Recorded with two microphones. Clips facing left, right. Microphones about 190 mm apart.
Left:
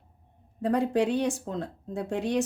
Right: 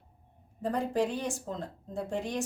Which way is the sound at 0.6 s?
70° left (ahead or behind).